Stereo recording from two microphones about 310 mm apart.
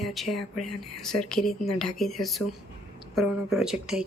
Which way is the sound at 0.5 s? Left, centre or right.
Left.